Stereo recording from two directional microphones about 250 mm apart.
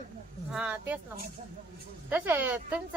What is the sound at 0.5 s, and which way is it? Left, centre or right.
Speech, centre.